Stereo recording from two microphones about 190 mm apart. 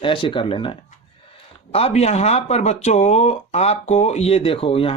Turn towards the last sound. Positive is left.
turn(degrees=30)  # may be behind; listen again after turning